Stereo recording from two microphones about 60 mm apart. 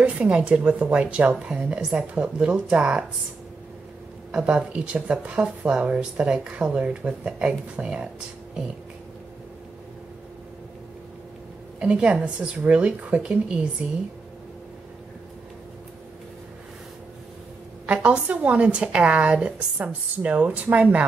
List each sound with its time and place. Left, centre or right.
0.0 s a woman's voice: centre
4.3 s speech: centre
11.8 s speech: centre
17.8 s a woman's voice: right